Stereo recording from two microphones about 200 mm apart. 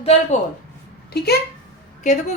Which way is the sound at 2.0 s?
35° left (ahead or behind).